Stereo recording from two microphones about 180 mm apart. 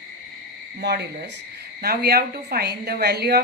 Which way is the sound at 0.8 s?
60° right (ahead or behind).